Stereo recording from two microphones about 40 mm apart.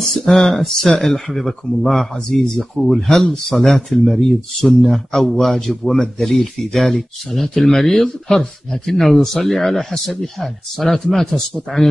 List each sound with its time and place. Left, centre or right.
0.0 s speech: centre
2.4 s speech: centre
2.8 s speech: centre